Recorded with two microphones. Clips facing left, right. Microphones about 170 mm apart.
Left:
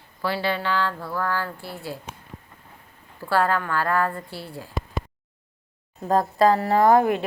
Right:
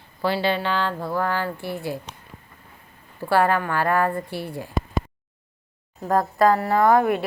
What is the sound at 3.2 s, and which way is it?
A woman's voice, 15° right (ahead or behind).